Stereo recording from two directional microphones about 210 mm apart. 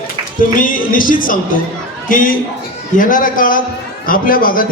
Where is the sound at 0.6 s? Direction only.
40° left (ahead or behind).